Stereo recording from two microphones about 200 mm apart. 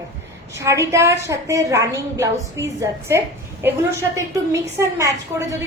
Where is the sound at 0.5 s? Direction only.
15° right (ahead or behind).